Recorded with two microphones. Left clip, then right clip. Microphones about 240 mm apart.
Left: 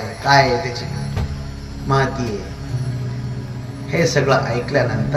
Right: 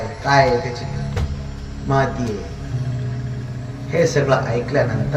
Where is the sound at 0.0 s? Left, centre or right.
Left.